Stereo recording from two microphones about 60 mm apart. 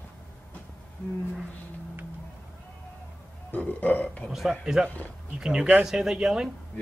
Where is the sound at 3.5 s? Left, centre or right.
Left.